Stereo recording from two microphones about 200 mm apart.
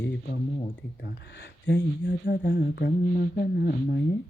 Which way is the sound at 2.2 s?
55° left (ahead or behind).